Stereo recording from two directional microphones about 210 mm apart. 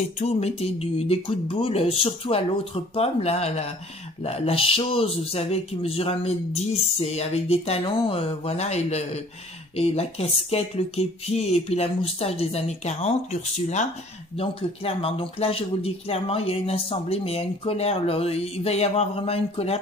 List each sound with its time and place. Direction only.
0.0 s speech: 30° left (ahead or behind)